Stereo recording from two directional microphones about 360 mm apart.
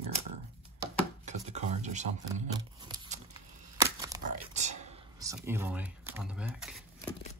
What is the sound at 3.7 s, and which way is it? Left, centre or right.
Crumpling, centre.